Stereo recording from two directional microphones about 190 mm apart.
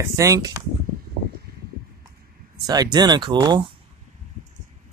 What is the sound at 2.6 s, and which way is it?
Speech, 20° right (ahead or behind).